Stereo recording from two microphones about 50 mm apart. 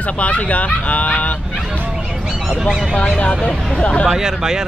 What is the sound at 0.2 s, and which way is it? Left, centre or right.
Speech, left.